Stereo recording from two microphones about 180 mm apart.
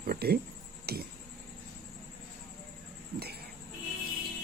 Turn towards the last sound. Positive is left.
turn(degrees=-60)  # may be behind; listen again after turning